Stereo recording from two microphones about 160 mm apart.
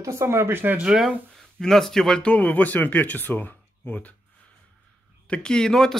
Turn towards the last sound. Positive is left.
turn(degrees=5)  # may be behind; listen again after turning